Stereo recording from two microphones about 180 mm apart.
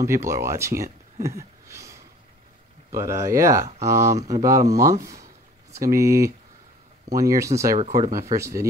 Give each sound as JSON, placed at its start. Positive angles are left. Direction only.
{"t": 0.0, "sound": "speech", "side_deg": -15}
{"t": 1.2, "sound": "a sound", "side_deg": -15}
{"t": 2.9, "sound": "speech", "side_deg": -15}